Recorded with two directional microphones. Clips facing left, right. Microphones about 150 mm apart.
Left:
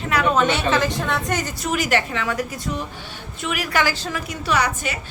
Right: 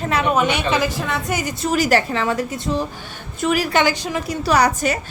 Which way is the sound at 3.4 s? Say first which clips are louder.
Right 8 dB; 40° right (ahead or behind).